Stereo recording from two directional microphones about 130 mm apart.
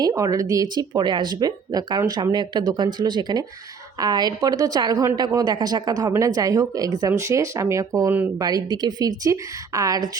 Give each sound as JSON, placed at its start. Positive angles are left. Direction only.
{"t": 0.0, "sound": "a woman's voice", "side_deg": -25}